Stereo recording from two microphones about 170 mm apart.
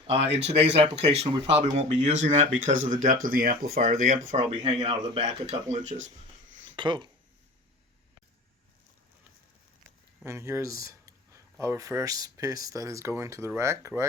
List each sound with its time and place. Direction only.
0.3 s speech: 40° right (ahead or behind)
6.7 s speech: 30° right (ahead or behind)
10.2 s speech: 15° right (ahead or behind)